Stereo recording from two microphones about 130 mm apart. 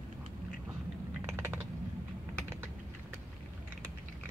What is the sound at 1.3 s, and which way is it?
Typing, 15° right (ahead or behind).